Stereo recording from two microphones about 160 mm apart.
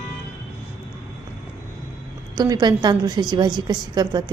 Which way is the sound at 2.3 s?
25° right (ahead or behind).